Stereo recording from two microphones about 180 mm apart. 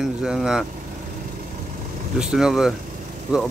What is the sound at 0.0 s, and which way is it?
Speech, 5° right (ahead or behind).